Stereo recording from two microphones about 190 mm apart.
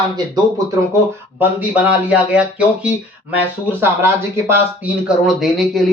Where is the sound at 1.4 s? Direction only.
5° right (ahead or behind).